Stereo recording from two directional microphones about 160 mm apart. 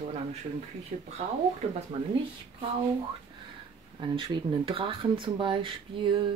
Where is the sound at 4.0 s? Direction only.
30° right (ahead or behind).